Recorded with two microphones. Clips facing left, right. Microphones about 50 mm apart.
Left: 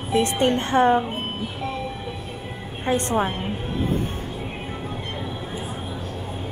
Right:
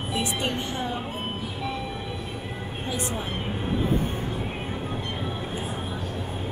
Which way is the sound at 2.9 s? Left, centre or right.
Left.